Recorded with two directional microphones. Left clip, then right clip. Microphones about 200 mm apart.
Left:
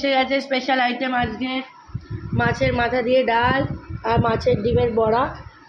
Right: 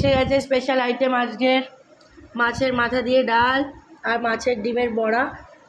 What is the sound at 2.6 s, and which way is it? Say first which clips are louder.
Speech: left 1 dB; 90° right.